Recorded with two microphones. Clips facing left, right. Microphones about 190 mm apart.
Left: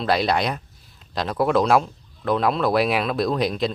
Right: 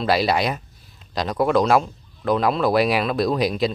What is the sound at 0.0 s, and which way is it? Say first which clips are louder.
Speech: right 1 dB; 5° right (ahead or behind).